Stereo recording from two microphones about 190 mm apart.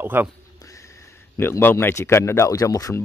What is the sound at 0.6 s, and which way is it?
A man's voice, 15° left (ahead or behind).